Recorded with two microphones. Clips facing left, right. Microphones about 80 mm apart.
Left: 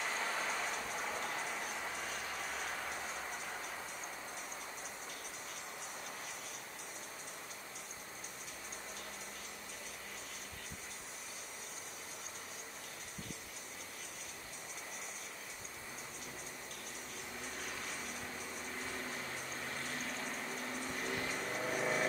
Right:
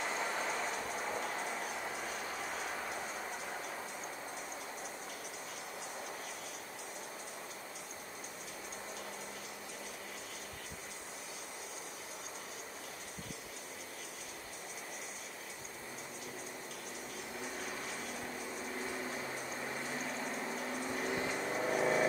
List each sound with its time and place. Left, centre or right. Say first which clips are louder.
0.0 s vehicle: right 2 dB; centre
17.6 s a sound: right 2 dB; centre
18.7 s vehicle: right 3 dB; centre